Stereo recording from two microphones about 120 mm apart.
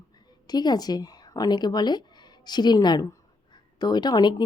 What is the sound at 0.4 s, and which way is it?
Speech, 35° left (ahead or behind).